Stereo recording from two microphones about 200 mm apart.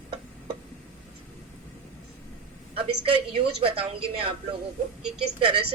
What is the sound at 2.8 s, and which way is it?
A man's voice, 25° right (ahead or behind).